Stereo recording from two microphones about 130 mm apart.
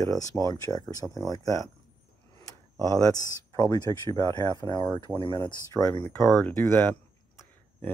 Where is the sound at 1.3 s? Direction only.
25° left (ahead or behind).